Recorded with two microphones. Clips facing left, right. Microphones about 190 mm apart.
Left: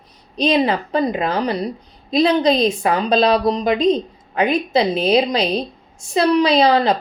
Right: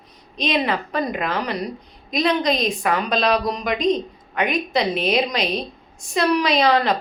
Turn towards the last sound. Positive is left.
turn(degrees=30)  # may be behind; listen again after turning